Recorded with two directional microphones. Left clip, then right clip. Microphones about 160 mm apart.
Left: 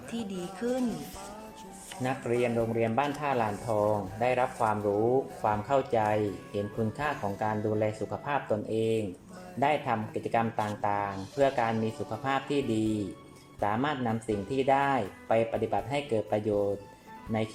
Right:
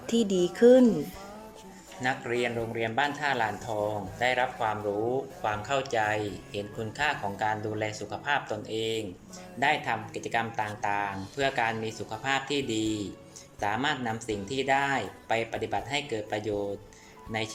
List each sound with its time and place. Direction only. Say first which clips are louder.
0.1 s speech: right 12 dB; 40° right (ahead or behind)
2.0 s speech: even; 10° left (ahead or behind)